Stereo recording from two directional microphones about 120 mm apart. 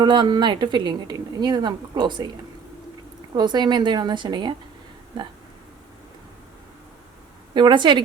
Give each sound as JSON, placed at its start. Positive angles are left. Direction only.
{"t": 0.0, "sound": "speech", "side_deg": -40}
{"t": 3.3, "sound": "speech", "side_deg": -40}
{"t": 7.5, "sound": "speech", "side_deg": -40}